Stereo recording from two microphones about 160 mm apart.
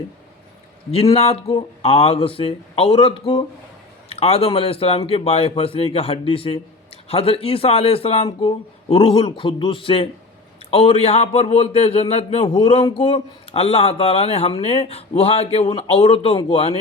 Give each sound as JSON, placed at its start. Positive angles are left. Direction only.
{"t": 1.1, "sound": "a man's voice", "side_deg": 40}